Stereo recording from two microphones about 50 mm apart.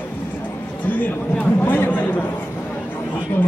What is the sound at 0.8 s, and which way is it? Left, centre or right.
Speech, left.